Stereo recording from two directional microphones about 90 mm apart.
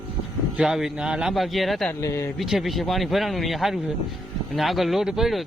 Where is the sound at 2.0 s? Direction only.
35° left (ahead or behind).